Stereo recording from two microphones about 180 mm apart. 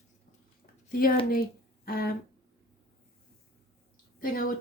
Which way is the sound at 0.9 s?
55° left (ahead or behind).